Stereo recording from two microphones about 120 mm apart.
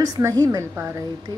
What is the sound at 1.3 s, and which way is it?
Music, 25° right (ahead or behind).